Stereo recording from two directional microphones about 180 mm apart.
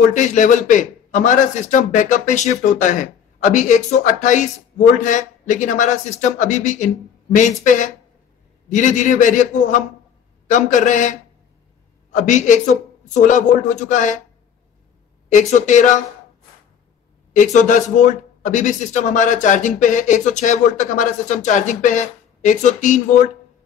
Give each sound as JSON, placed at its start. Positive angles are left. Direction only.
{"t": 0.1, "sound": "a man's voice", "side_deg": 45}
{"t": 15.3, "sound": "a man's voice", "side_deg": 45}
{"t": 17.4, "sound": "a man's voice", "side_deg": 45}